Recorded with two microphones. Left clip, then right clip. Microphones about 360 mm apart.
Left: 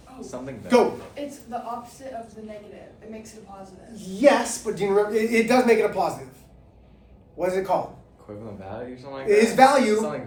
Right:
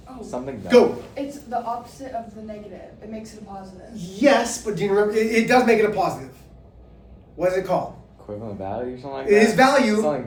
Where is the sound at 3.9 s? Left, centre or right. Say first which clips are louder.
Right 1 dB; centre.